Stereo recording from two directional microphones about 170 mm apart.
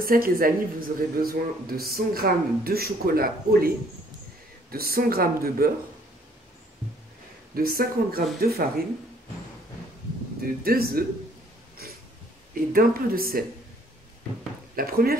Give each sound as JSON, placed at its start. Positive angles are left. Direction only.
{"t": 0.0, "sound": "speech", "side_deg": -60}
{"t": 7.5, "sound": "speech", "side_deg": -60}
{"t": 10.4, "sound": "speech", "side_deg": -60}
{"t": 11.8, "sound": "a sound", "side_deg": -60}
{"t": 12.7, "sound": "speech", "side_deg": -60}
{"t": 14.8, "sound": "speech", "side_deg": -60}